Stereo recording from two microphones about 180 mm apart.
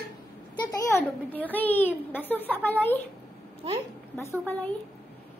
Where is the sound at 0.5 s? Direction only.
20° left (ahead or behind).